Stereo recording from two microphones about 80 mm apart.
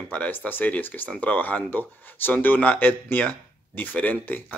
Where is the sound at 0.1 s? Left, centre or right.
Centre.